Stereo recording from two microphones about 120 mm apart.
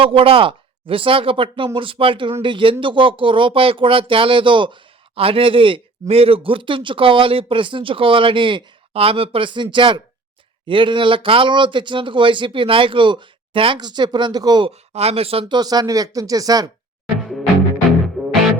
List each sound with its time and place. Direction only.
0.0 s speech: 50° right (ahead or behind)
14.7 s speech: 60° right (ahead or behind)
15.5 s speech: 35° right (ahead or behind)
18.2 s music: centre (ahead or behind)